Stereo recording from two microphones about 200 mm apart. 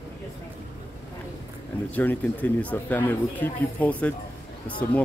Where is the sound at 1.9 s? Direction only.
5° left (ahead or behind).